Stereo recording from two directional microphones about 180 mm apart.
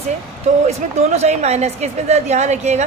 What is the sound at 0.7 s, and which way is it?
A woman's voice, 35° right (ahead or behind).